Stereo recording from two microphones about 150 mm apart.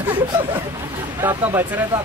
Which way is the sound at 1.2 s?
15° right (ahead or behind).